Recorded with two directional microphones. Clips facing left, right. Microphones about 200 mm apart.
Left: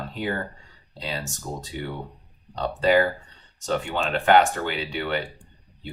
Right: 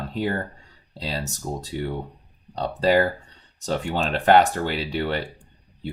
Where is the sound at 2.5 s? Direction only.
35° right (ahead or behind).